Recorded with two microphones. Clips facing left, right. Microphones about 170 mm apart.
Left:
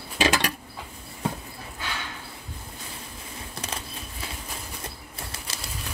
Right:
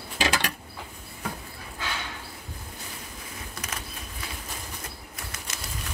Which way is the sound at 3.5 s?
30° left (ahead or behind).